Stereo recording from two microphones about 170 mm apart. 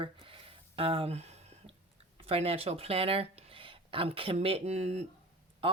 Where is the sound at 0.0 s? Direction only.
30° right (ahead or behind).